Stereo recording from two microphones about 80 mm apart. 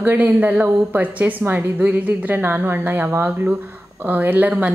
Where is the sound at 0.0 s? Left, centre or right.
Right.